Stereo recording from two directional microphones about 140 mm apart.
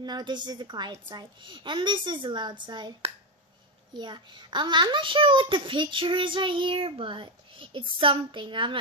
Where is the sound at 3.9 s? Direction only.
35° right (ahead or behind).